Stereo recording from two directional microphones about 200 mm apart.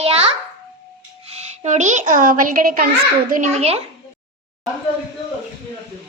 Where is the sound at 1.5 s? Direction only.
35° right (ahead or behind).